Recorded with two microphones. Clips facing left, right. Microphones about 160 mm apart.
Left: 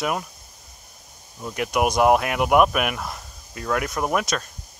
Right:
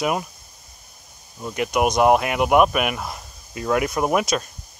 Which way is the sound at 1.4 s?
Centre (ahead or behind).